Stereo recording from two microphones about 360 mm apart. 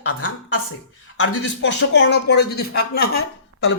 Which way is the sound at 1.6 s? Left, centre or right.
Left.